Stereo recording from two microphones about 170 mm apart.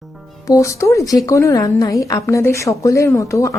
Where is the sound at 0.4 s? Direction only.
20° left (ahead or behind).